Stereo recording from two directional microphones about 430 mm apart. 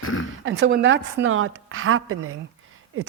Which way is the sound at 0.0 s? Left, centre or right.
Left.